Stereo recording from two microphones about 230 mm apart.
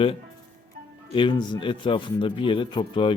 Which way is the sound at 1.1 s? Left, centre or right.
Left.